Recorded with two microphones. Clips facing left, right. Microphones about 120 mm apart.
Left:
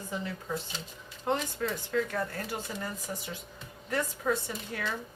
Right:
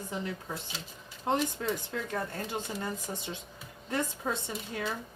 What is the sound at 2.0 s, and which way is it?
Speech, 25° right (ahead or behind).